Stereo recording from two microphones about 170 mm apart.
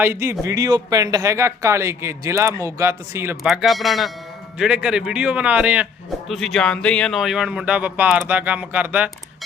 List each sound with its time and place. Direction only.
0.0 s a man's voice: 15° right (ahead or behind)
3.4 s a man's voice: centre (ahead or behind)